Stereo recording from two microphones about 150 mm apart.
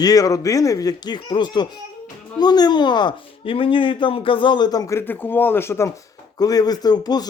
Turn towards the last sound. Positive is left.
turn(degrees=25)  # may be behind; listen again after turning